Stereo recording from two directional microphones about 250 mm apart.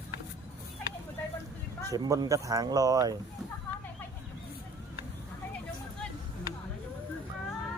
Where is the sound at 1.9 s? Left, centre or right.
Centre.